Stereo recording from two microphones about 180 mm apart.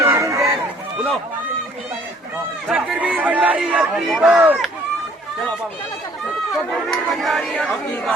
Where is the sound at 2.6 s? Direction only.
5° right (ahead or behind).